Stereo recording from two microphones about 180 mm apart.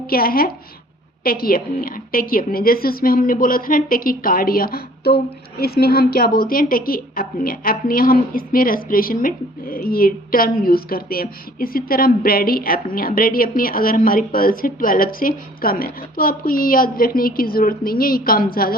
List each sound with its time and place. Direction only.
0.1 s a woman's voice: 55° left (ahead or behind)